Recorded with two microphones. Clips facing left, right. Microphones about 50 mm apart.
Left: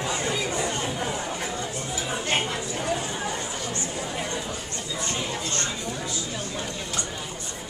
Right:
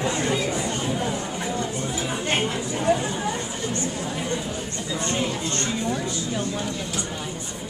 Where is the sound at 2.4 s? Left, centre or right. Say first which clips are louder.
Right 3 dB; centre.